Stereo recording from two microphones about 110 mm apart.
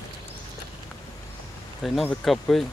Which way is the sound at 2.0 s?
5° left (ahead or behind).